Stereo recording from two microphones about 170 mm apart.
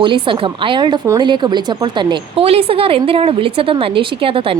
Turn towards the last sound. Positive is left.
turn(degrees=-30)  # may be behind; listen again after turning